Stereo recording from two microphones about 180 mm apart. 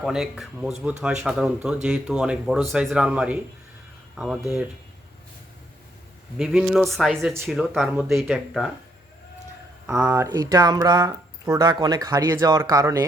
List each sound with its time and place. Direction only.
0.0 s speech: centre (ahead or behind)
6.3 s speech: 5° right (ahead or behind)
9.8 s speech: 10° right (ahead or behind)
10.2 s speech: 20° right (ahead or behind)